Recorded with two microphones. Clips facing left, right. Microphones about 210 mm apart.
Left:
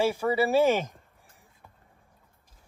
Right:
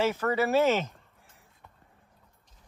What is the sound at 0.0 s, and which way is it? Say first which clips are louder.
Speech: left 2 dB; 10° left (ahead or behind).